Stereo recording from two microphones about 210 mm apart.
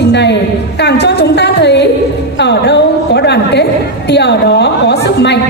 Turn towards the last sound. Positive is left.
turn(degrees=55)  # may be behind; listen again after turning